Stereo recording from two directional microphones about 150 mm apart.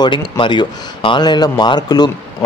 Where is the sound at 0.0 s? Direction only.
30° left (ahead or behind).